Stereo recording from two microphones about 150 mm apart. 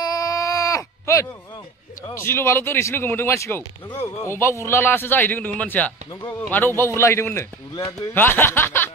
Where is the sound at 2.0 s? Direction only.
15° left (ahead or behind).